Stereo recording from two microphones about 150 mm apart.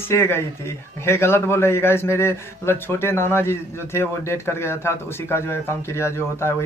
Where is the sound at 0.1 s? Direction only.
15° left (ahead or behind).